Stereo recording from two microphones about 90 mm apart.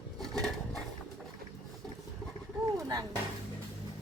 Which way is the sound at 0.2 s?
5° left (ahead or behind).